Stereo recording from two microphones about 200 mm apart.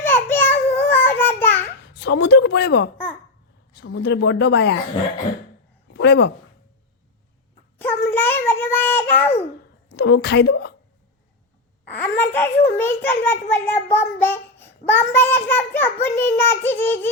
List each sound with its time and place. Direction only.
0.0 s baby cry: 10° left (ahead or behind)
0.8 s child singing: 10° left (ahead or behind)
2.0 s speech: 60° left (ahead or behind)
5.9 s speech: 60° left (ahead or behind)
7.8 s child singing: 10° left (ahead or behind)
9.9 s speech: 55° left (ahead or behind)
11.9 s a child's voice: 10° left (ahead or behind)